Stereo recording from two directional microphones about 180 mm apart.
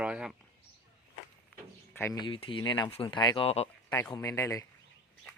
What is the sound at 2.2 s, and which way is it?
Speech, 30° left (ahead or behind).